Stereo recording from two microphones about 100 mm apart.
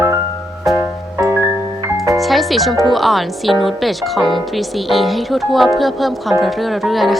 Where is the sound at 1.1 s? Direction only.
30° right (ahead or behind).